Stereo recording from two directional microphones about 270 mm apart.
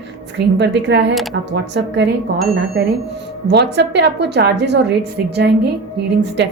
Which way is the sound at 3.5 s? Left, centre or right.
Right.